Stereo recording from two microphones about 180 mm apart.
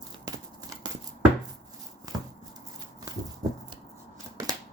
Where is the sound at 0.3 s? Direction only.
20° right (ahead or behind).